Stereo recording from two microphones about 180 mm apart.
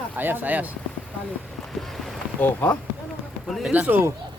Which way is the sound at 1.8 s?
5° left (ahead or behind).